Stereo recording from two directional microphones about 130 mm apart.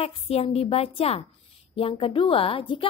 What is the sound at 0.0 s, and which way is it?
A woman's voice, 50° left (ahead or behind).